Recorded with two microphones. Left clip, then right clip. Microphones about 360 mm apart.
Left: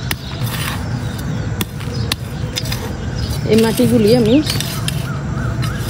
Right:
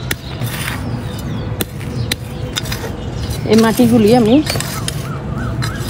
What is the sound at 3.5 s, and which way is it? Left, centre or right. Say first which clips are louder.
Speech: right 2 dB; right.